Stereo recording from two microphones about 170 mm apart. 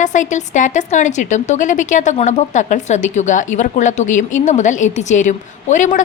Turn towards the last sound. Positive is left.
turn(degrees=50)  # may be behind; listen again after turning